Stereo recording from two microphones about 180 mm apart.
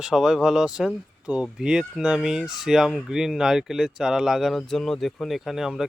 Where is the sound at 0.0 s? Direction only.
5° right (ahead or behind).